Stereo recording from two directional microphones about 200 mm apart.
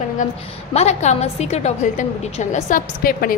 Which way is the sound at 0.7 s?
35° left (ahead or behind).